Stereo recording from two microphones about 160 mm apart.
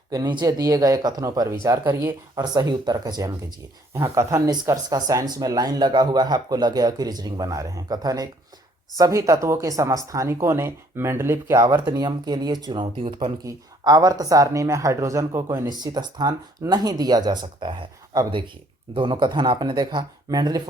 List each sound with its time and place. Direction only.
0.1 s speech: 25° right (ahead or behind)